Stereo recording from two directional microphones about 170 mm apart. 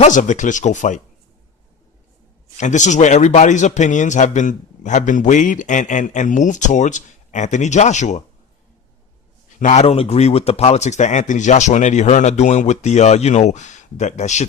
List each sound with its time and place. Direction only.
0.0 s a man's voice: 45° left (ahead or behind)
2.6 s a man's voice: 45° left (ahead or behind)
9.6 s a man's voice: 45° left (ahead or behind)